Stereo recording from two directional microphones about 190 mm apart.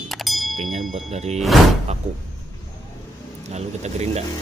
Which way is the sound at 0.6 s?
35° right (ahead or behind).